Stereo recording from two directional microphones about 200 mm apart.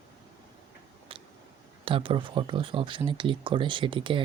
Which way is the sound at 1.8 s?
25° right (ahead or behind).